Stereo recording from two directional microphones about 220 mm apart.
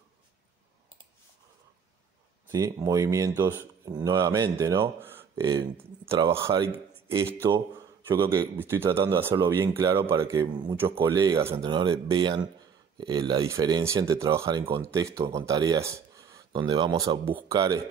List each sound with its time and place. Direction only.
2.4 s speech: 15° right (ahead or behind)
8.1 s speech: 15° right (ahead or behind)